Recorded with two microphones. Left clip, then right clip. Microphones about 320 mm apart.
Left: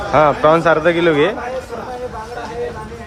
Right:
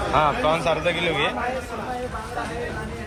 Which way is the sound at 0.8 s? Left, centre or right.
Left.